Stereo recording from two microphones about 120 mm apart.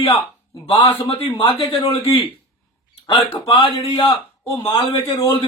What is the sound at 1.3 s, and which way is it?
Speech, 45° left (ahead or behind).